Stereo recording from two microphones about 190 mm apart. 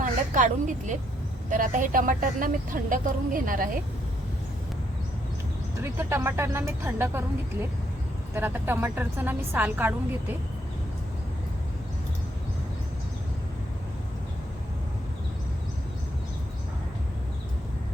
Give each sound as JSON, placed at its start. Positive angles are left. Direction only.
{"t": 0.0, "sound": "a woman's voice", "side_deg": -40}
{"t": 5.8, "sound": "a woman's voice", "side_deg": -15}
{"t": 8.3, "sound": "a woman's voice", "side_deg": -10}